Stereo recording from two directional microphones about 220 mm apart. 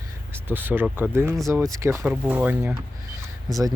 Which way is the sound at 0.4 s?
10° right (ahead or behind).